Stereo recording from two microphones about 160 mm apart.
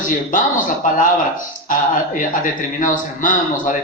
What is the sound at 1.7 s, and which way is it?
A man's voice, 55° left (ahead or behind).